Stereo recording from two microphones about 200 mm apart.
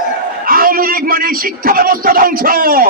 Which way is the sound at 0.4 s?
45° right (ahead or behind).